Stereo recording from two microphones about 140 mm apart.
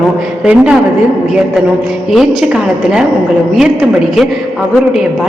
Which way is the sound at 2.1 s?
5° right (ahead or behind).